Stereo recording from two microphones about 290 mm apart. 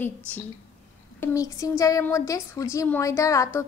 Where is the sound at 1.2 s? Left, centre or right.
Centre.